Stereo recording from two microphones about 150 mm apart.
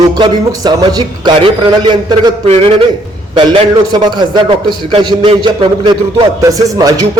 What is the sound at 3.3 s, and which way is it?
A man's voice, 35° right (ahead or behind).